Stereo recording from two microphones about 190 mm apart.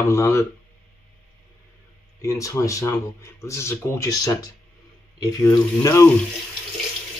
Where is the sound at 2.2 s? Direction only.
15° left (ahead or behind).